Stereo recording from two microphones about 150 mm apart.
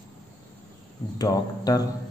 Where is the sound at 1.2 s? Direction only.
25° left (ahead or behind).